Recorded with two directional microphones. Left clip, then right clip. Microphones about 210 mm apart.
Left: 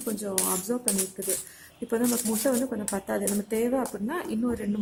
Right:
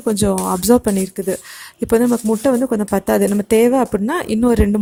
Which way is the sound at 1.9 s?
50° right (ahead or behind).